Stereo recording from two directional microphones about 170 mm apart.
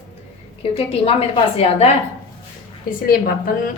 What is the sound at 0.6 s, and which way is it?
A woman's voice, 35° left (ahead or behind).